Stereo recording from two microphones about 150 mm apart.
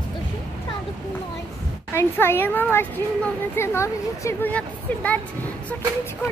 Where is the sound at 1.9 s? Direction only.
15° left (ahead or behind).